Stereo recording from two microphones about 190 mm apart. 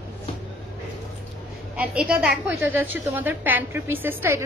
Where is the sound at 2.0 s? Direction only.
5° right (ahead or behind).